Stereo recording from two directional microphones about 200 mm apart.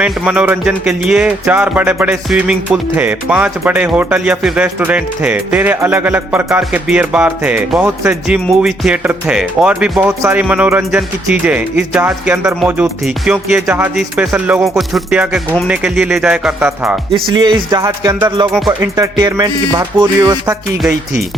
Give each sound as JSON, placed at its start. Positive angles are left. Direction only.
{"t": 0.0, "sound": "speech", "side_deg": -5}
{"t": 17.3, "sound": "speech", "side_deg": -20}
{"t": 18.5, "sound": "speech", "side_deg": 0}
{"t": 18.9, "sound": "speech", "side_deg": -20}